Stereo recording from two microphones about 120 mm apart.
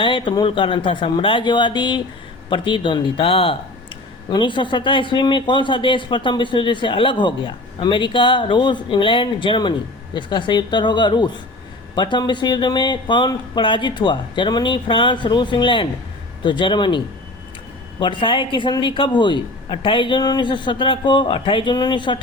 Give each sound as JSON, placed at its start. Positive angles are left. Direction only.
{"t": 0.0, "sound": "speech", "side_deg": 45}
{"t": 18.0, "sound": "speech", "side_deg": 45}